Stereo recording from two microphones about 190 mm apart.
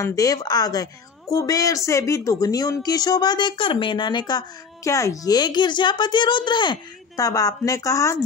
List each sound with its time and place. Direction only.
0.0 s speech: 15° left (ahead or behind)